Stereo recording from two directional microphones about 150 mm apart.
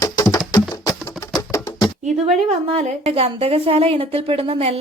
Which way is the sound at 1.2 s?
25° left (ahead or behind).